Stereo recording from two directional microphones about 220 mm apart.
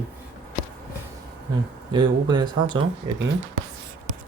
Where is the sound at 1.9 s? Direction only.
20° right (ahead or behind).